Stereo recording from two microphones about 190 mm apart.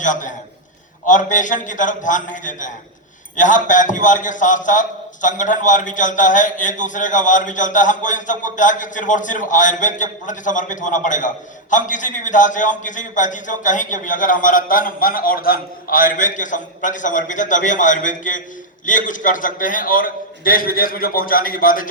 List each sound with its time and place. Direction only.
0.0 s a man's voice: 40° left (ahead or behind)